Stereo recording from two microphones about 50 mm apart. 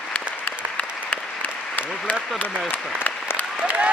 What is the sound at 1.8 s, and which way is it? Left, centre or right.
Applause, left.